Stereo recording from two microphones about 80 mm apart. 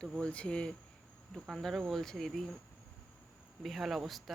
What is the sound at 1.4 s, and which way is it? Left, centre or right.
Speech, centre.